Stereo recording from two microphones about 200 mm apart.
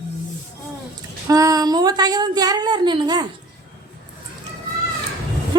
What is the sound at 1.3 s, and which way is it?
Speech, 15° right (ahead or behind).